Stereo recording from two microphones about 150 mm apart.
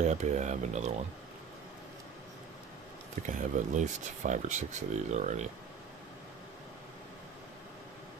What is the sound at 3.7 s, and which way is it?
Speech, 55° right (ahead or behind).